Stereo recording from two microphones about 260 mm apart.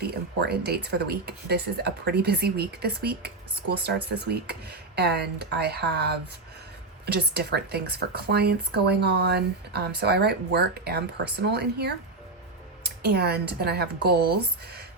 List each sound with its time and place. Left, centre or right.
0.0 s speech: right